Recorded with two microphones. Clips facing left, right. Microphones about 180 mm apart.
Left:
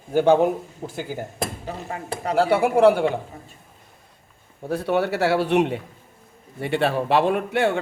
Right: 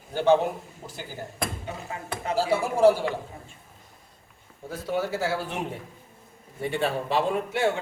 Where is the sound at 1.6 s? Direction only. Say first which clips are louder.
Left 4 dB; 35° left (ahead or behind).